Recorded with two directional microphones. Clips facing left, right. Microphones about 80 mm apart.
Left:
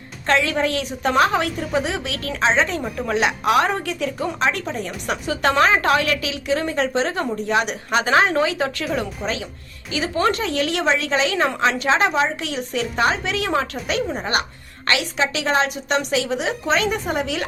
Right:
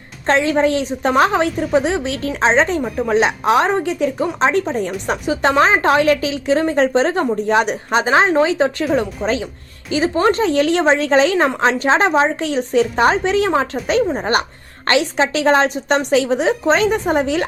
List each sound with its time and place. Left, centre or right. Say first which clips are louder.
0.3 s a woman's voice: right 5 dB; right
5.0 s a woman's voice: right 2 dB; right